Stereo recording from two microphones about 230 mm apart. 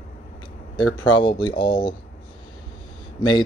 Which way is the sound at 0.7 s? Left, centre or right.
Left.